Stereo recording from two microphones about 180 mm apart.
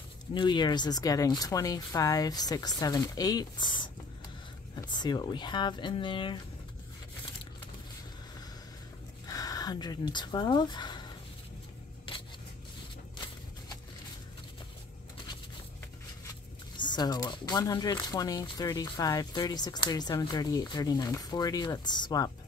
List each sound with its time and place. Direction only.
0.3 s speech: 25° left (ahead or behind)
9.3 s speech: 20° left (ahead or behind)
12.1 s scissors: 30° left (ahead or behind)
16.7 s speech: 25° left (ahead or behind)